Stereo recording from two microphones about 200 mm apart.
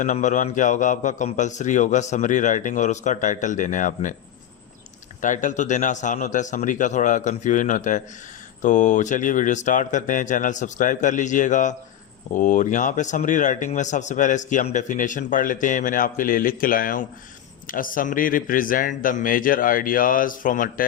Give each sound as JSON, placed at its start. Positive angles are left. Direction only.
{"t": 0.0, "sound": "a man's voice", "side_deg": 40}
{"t": 5.2, "sound": "a man's voice", "side_deg": 40}